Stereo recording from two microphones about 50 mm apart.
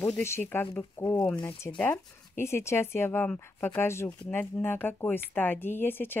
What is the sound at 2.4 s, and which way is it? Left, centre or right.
Speech, left.